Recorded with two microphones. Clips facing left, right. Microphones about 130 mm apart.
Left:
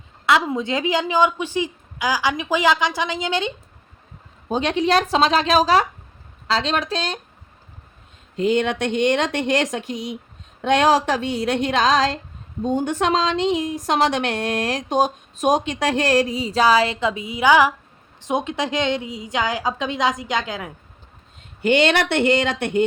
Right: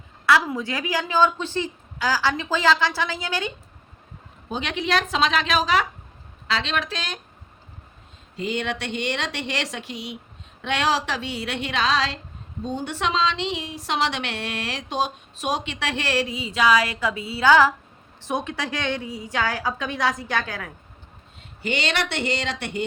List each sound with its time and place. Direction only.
0.3 s a woman's voice: 20° left (ahead or behind)
4.4 s speech: 40° left (ahead or behind)
8.4 s a woman's voice: 50° left (ahead or behind); by 20.7 s 20° left (ahead or behind)
21.6 s a woman's voice: 55° left (ahead or behind)